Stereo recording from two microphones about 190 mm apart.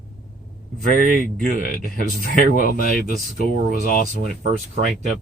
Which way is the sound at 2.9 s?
40° right (ahead or behind).